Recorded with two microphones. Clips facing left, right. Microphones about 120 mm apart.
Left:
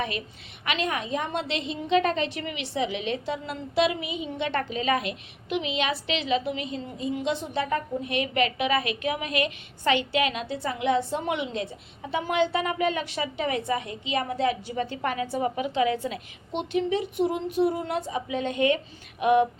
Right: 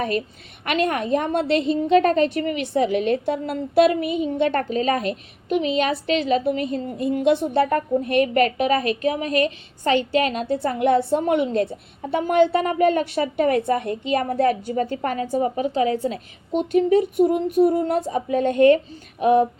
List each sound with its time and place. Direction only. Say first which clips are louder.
0.0 s a woman's voice: right 7 dB; 45° right (ahead or behind)
19.2 s speech: right 4 dB; 35° right (ahead or behind)